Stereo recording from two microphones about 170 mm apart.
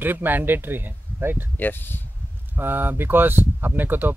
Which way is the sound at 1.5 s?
10° left (ahead or behind).